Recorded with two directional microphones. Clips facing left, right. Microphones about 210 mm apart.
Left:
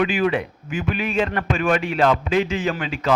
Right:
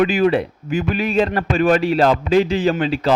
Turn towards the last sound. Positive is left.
turn(degrees=-35)  # may be behind; listen again after turning